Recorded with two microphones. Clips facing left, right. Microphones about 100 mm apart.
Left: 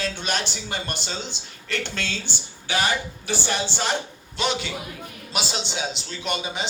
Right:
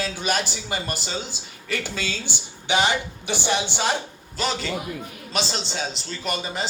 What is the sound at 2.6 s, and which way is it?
Speech, 20° right (ahead or behind).